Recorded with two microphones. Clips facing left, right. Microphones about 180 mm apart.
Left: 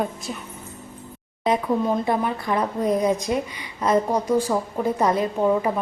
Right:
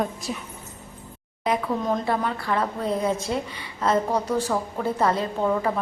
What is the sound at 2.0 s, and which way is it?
A woman's voice, 15° left (ahead or behind).